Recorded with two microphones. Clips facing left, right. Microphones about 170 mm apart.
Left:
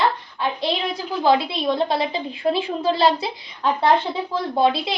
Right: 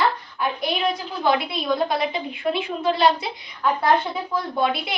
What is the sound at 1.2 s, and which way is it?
A woman's voice, 25° left (ahead or behind).